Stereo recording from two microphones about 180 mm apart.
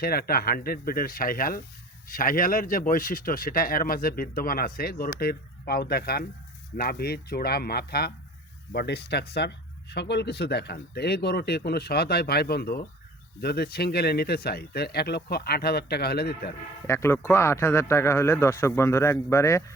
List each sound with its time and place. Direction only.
0.0 s speech: 55° left (ahead or behind)
16.8 s speech: 15° left (ahead or behind)